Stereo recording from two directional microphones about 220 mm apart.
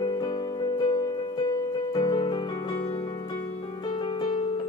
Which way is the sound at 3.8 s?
20° left (ahead or behind).